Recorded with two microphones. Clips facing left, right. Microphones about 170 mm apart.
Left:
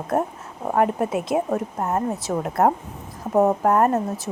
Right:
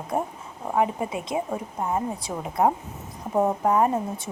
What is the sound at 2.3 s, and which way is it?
Speech, 70° left (ahead or behind).